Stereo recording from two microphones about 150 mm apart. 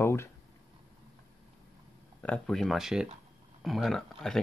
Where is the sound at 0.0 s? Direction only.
15° left (ahead or behind).